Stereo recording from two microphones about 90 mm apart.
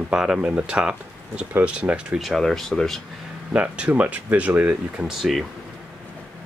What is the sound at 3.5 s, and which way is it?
Speech, 15° right (ahead or behind).